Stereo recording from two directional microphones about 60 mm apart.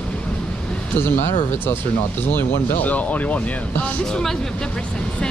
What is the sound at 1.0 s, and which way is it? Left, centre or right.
Speech, left.